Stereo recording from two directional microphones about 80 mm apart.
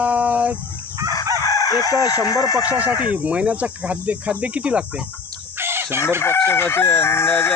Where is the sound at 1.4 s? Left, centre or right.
Left.